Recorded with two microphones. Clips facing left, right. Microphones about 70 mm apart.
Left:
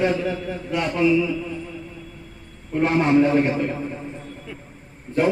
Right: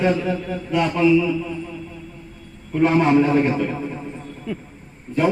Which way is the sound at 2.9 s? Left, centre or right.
Centre.